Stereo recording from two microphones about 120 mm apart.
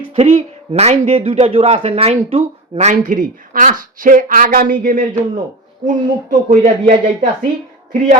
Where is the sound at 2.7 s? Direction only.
90° right.